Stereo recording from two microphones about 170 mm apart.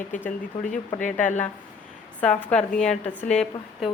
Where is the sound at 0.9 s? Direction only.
50° left (ahead or behind).